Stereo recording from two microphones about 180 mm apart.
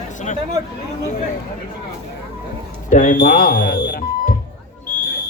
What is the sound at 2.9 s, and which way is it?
Speech, 45° left (ahead or behind).